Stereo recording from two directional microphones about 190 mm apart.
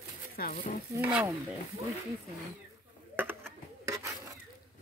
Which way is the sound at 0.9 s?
10° right (ahead or behind).